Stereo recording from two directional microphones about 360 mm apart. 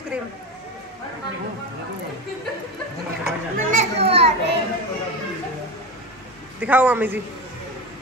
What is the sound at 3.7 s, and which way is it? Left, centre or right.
Speech, centre.